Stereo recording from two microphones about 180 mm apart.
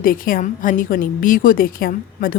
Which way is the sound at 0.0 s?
50° left (ahead or behind).